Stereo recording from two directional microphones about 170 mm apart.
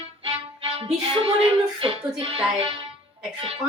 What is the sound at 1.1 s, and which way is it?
Music, 35° right (ahead or behind).